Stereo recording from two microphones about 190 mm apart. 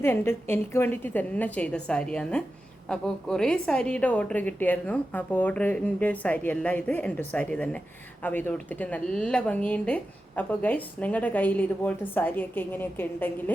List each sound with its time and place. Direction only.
0.0 s speech: 10° left (ahead or behind)